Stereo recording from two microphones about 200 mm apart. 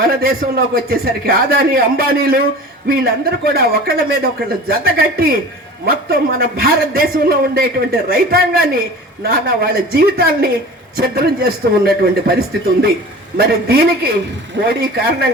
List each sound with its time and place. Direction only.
0.0 s a man's voice: 50° right (ahead or behind)